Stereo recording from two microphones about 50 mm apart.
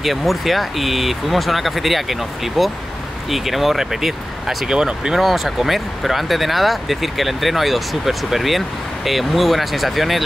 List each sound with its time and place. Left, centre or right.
0.0 s speech: centre
4.6 s speech: centre
5.2 s speech: centre